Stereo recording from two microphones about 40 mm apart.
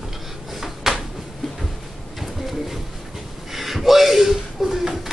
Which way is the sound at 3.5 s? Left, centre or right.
Centre.